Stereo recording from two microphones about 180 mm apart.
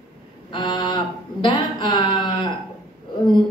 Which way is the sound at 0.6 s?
25° left (ahead or behind).